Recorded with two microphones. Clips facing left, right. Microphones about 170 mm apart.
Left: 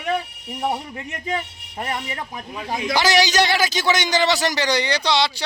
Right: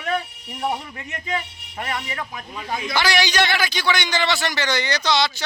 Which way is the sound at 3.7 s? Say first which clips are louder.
Left 3 dB; 40° left (ahead or behind).